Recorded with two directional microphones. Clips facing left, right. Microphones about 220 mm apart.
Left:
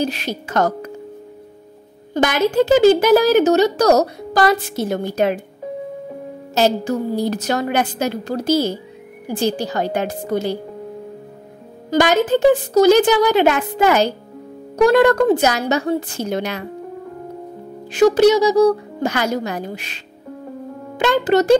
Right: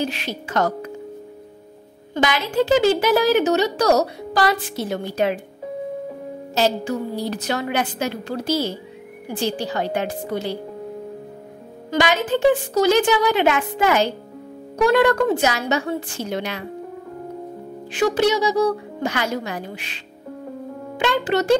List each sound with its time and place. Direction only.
0.0 s a woman's voice: 40° left (ahead or behind)
2.1 s a woman's voice: 45° left (ahead or behind)
6.5 s a woman's voice: 45° left (ahead or behind)
11.9 s a woman's voice: 40° left (ahead or behind)
17.9 s a woman's voice: 40° left (ahead or behind)
21.0 s a woman's voice: 40° left (ahead or behind)